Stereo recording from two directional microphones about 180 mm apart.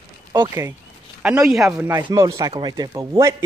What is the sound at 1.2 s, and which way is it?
Speech, 5° right (ahead or behind).